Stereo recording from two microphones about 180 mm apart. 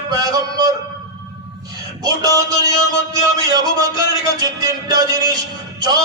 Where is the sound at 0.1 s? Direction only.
20° right (ahead or behind).